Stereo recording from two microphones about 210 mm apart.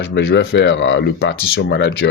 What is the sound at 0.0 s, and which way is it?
Speech, 60° left (ahead or behind).